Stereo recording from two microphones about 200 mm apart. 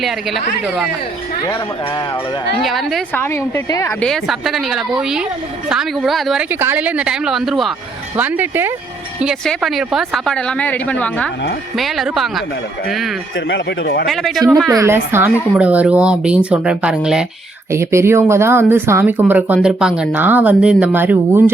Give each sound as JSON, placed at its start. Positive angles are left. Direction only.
{"t": 0.0, "sound": "speech", "side_deg": 0}
{"t": 2.6, "sound": "speech", "side_deg": 0}
{"t": 3.2, "sound": "a woman's voice", "side_deg": 10}
{"t": 4.0, "sound": "a woman's voice", "side_deg": 0}
{"t": 9.2, "sound": "speech", "side_deg": 0}
{"t": 13.5, "sound": "speech", "side_deg": 55}
{"t": 14.1, "sound": "speech", "side_deg": 0}
{"t": 14.7, "sound": "a woman's voice", "side_deg": -15}